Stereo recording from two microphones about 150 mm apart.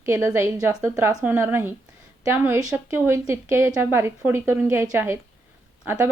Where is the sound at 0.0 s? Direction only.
20° right (ahead or behind).